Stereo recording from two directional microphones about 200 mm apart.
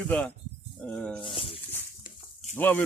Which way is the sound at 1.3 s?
30° left (ahead or behind).